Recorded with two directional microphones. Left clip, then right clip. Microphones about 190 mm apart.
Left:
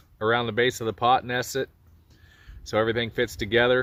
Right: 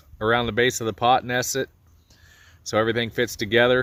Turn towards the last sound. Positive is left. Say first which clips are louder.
# right 2 dB
turn(degrees=-55)  # may be behind; listen again after turning